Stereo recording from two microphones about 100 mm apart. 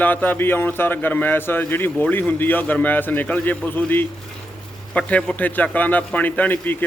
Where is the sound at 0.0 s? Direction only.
20° left (ahead or behind).